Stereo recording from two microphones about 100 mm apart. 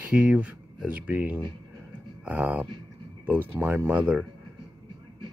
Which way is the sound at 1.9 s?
15° right (ahead or behind).